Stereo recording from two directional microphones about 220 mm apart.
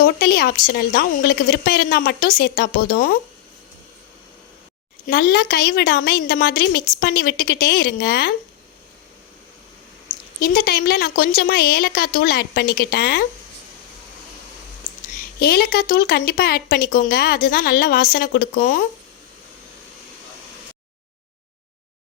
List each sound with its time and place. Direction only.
0.0 s speech: 45° left (ahead or behind)
5.0 s speech: 45° left (ahead or behind)
10.4 s speech: 45° left (ahead or behind)
15.4 s speech: 45° left (ahead or behind)